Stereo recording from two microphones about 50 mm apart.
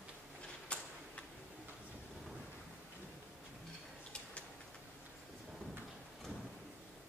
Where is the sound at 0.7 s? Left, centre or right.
Left.